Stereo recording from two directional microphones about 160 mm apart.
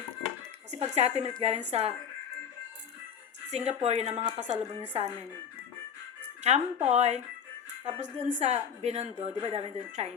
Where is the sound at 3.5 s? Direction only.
45° right (ahead or behind).